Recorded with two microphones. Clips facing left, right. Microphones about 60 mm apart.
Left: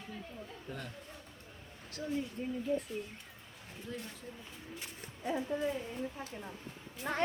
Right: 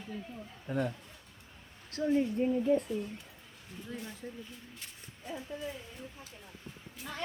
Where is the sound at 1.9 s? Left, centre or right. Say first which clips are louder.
Right 8 dB; right.